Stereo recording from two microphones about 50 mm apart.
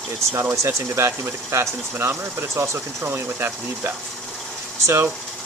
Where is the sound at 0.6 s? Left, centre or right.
Right.